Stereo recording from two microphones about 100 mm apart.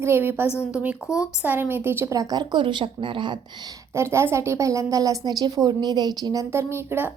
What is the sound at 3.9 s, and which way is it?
A woman's voice, 25° right (ahead or behind).